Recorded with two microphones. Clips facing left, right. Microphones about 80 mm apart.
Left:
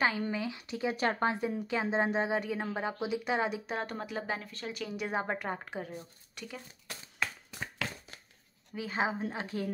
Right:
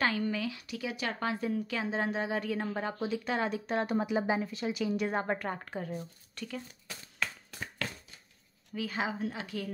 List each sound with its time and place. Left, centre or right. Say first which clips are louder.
0.0 s a woman's voice: even; left
1.4 s speech: left 1 dB; centre
4.0 s speech: right 6 dB; centre
8.7 s a woman's voice: left 1 dB; left